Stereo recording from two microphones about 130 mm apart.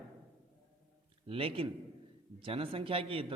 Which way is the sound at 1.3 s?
45° right (ahead or behind).